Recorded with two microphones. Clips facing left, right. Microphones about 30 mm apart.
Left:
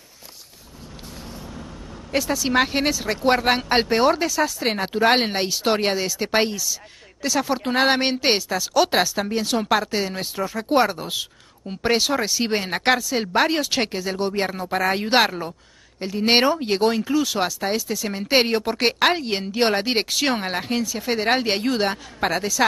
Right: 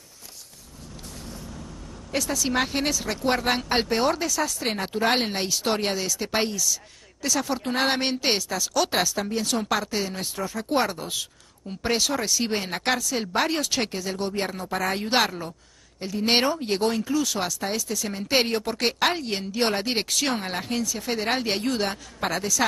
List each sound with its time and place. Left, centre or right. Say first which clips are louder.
2.1 s speech: left 5 dB; left